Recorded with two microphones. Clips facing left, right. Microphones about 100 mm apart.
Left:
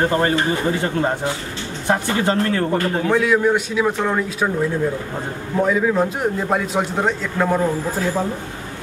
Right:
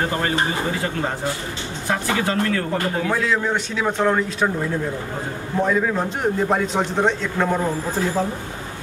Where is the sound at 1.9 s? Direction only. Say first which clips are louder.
Left 3 dB; 30° left (ahead or behind).